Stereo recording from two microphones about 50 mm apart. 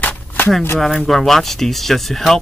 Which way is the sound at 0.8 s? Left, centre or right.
Centre.